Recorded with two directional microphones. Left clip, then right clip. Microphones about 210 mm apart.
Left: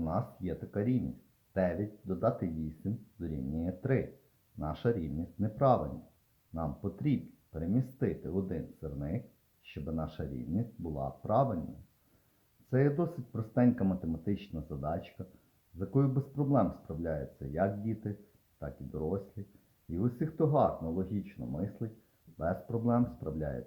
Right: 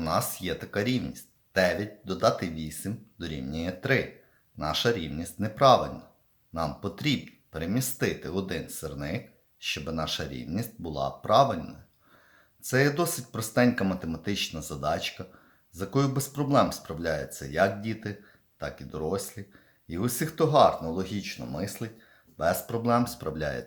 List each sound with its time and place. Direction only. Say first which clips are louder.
0.0 s speech: right 8 dB; 10° right (ahead or behind)
12.7 s speech: right 6 dB; 5° right (ahead or behind)
14.5 s speech: right 8 dB; 15° right (ahead or behind)